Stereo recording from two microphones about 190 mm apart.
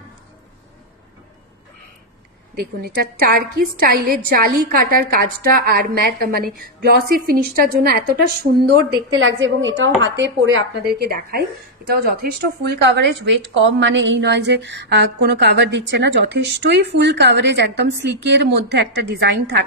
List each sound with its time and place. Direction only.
2.5 s a woman's voice: 55° right (ahead or behind)
9.2 s a woman's voice: 90° right
10.2 s speech: 75° right (ahead or behind)
11.1 s a woman's voice: 50° right (ahead or behind)